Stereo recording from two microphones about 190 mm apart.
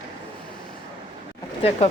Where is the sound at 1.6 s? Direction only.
30° left (ahead or behind).